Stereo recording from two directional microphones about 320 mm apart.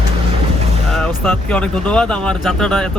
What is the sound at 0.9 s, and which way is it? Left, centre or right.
Speech, centre.